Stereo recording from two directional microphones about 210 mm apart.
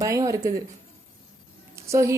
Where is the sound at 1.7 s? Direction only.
15° right (ahead or behind).